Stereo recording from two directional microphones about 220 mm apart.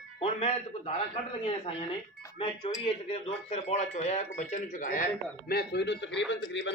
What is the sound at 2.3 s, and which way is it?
A man's voice, 20° left (ahead or behind).